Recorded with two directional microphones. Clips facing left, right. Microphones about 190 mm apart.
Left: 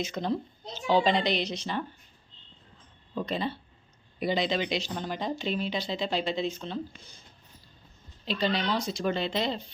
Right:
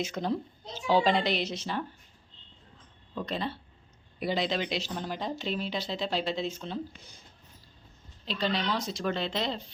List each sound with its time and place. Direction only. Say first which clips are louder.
0.0 s a child's voice: left 1 dB; 5° right (ahead or behind)
3.2 s speech: left 2 dB; centre (ahead or behind)
8.2 s speech: left 2 dB; centre (ahead or behind)